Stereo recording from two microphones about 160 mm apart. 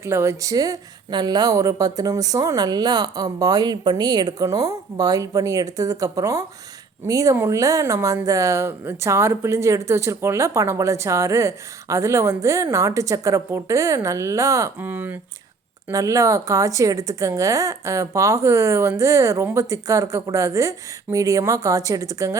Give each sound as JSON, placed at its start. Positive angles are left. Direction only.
{"t": 0.0, "sound": "speech", "side_deg": -15}